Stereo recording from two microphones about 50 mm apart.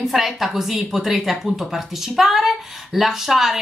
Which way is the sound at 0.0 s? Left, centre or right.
Centre.